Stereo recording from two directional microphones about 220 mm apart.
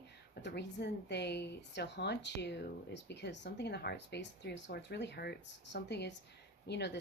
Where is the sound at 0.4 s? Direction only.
50° left (ahead or behind).